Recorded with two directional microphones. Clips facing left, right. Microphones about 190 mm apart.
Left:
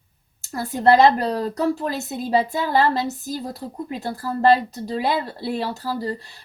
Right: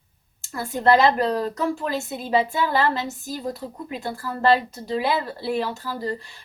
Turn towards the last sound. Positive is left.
turn(degrees=40)  # may be behind; listen again after turning